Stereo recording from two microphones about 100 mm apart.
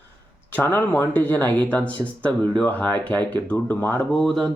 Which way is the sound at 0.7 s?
20° left (ahead or behind).